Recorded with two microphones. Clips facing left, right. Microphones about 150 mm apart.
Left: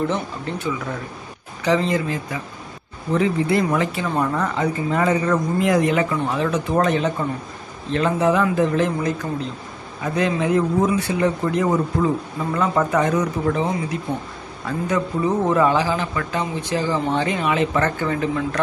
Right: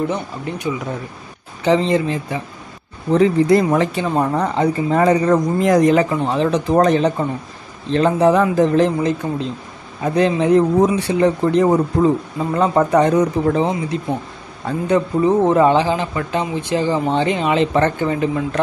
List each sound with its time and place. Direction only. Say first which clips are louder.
0.1 s speech: right 1 dB; 15° right (ahead or behind)
1.6 s speech: right 4 dB; 25° right (ahead or behind)
3.1 s speech: right 6 dB; 35° right (ahead or behind); by 18.6 s 20° right (ahead or behind)